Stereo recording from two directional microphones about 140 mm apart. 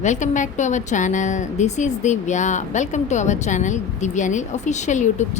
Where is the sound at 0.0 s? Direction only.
60° left (ahead or behind).